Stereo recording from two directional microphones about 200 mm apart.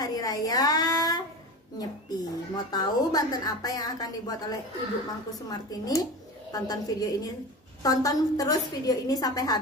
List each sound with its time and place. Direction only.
0.0 s a woman's voice: 20° left (ahead or behind)